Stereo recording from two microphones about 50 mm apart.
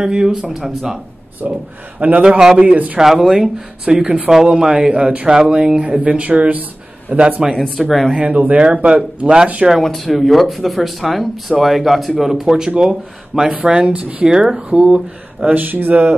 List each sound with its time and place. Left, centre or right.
0.0 s speech: centre
1.4 s a man's voice: right
2.2 s speech: centre
2.5 s speech: right
3.0 s speech: centre
4.0 s speech: right
4.3 s speech: centre; by 7.4 s right
7.7 s speech: centre
8.2 s speech: right
9.7 s speech: centre; by 14.3 s right
14.3 s speech: centre
15.4 s a man's voice: right